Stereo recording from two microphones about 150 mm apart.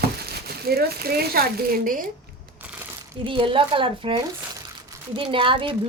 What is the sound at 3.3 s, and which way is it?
Speech, 35° right (ahead or behind).